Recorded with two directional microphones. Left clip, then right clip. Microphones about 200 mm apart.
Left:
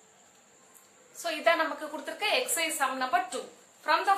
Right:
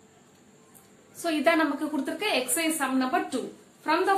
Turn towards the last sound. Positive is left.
turn(degrees=10)  # may be behind; listen again after turning